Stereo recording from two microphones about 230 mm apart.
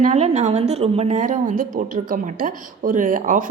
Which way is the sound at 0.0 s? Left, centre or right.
Right.